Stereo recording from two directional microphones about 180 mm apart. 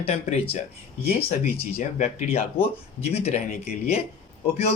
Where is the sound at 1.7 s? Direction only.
40° left (ahead or behind).